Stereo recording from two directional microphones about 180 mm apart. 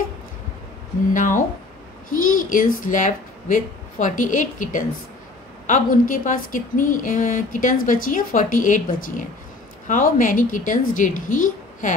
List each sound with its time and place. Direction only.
1.1 s a woman's voice: 45° left (ahead or behind)